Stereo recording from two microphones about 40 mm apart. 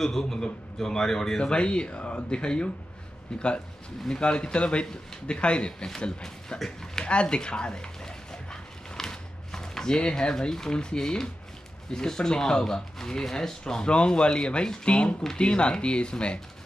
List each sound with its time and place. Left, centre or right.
0.0 s a man's voice: centre
1.4 s a man's voice: left
6.6 s a man's voice: centre
7.1 s dog: left
10.5 s a man's voice: centre